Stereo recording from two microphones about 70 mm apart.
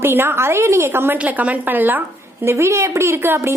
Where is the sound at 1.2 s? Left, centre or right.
Right.